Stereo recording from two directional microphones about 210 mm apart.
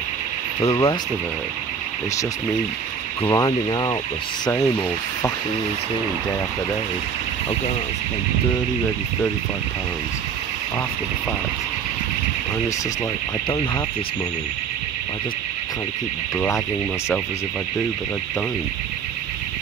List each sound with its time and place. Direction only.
0.6 s speech: 25° left (ahead or behind)
3.3 s speech: 20° left (ahead or behind)
16.3 s speech: 10° left (ahead or behind)